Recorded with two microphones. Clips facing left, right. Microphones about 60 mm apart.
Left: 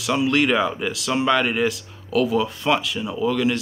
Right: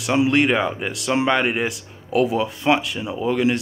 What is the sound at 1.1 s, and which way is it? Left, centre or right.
Speech, right.